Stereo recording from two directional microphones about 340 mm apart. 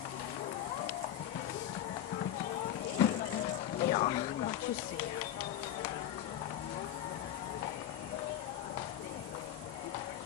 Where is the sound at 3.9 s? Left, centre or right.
Centre.